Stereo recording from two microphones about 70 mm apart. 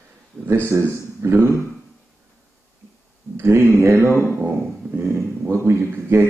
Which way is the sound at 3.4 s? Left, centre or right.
Right.